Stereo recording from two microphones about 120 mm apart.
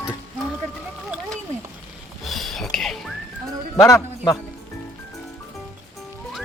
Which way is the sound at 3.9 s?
25° left (ahead or behind).